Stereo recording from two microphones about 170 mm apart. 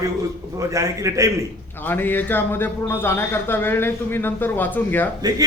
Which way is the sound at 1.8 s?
10° left (ahead or behind).